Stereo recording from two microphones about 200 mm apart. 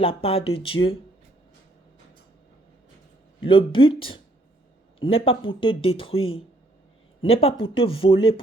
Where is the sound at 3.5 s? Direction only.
25° left (ahead or behind).